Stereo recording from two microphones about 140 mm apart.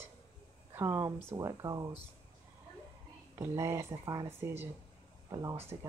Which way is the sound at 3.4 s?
20° right (ahead or behind).